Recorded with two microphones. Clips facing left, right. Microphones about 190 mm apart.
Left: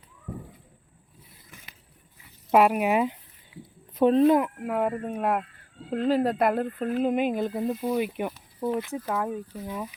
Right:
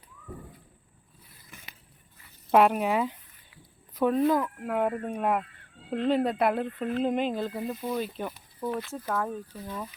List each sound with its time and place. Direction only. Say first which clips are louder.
2.5 s speech: left 1 dB; 5° left (ahead or behind)
3.5 s a sound: left 13 dB; 20° left (ahead or behind)
3.9 s speech: left 5 dB; 25° left (ahead or behind)
4.6 s speech: left 1 dB; 5° left (ahead or behind)